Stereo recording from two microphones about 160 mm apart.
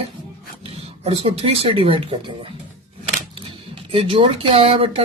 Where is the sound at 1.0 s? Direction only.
40° right (ahead or behind).